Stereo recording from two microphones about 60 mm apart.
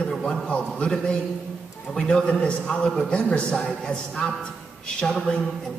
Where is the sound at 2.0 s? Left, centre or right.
Centre.